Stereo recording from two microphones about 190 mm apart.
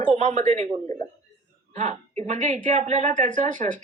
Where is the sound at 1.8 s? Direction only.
35° right (ahead or behind).